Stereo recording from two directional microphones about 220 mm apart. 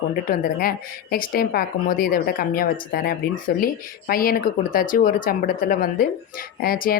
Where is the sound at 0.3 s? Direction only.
40° left (ahead or behind).